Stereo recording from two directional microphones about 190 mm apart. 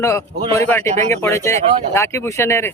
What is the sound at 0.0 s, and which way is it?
Speech, 15° left (ahead or behind).